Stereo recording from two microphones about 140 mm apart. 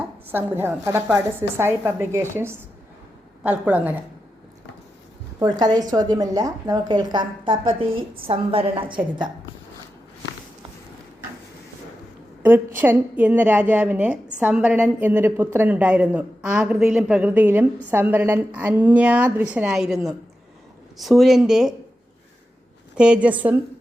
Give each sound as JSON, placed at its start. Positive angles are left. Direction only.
{"t": 0.0, "sound": "a woman's voice", "side_deg": -15}
{"t": 5.4, "sound": "a woman's voice", "side_deg": -30}
{"t": 12.4, "sound": "a woman's voice", "side_deg": -15}
{"t": 23.0, "sound": "a woman's voice", "side_deg": -5}